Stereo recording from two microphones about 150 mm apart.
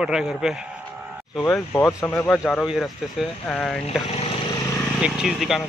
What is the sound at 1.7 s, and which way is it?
Speech, 20° left (ahead or behind).